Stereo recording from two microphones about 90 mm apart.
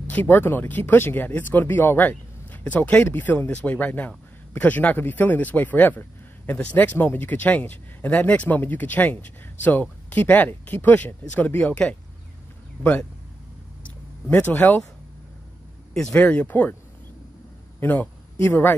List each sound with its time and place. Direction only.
0.0 s speech: 20° left (ahead or behind)
14.3 s speech: 20° left (ahead or behind)
16.2 s speech: 10° left (ahead or behind)
17.7 s a man's voice: 20° left (ahead or behind)